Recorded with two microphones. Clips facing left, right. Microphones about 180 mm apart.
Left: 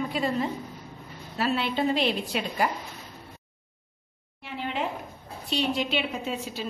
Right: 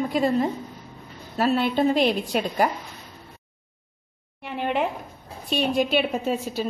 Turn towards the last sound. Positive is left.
turn(degrees=-45)  # may be behind; listen again after turning